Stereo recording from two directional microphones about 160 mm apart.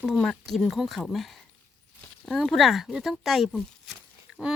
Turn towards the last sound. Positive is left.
turn(degrees=-5)  # may be behind; listen again after turning